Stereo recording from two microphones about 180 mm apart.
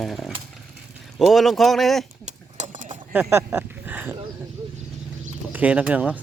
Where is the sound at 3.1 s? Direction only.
10° right (ahead or behind).